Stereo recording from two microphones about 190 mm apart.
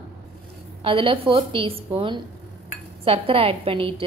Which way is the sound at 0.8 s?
30° right (ahead or behind).